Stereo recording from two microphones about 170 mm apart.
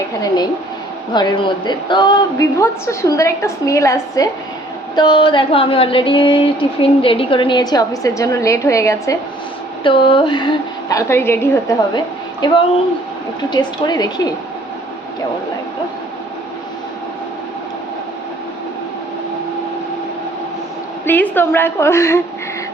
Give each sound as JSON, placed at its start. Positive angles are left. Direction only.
{"t": 1.1, "sound": "a woman's voice", "side_deg": 25}
{"t": 9.8, "sound": "a woman's voice", "side_deg": 30}
{"t": 11.9, "sound": "a woman's voice", "side_deg": 25}
{"t": 21.0, "sound": "a woman's voice", "side_deg": 10}